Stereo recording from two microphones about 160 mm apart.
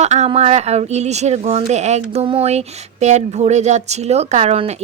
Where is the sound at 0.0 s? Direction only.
45° right (ahead or behind).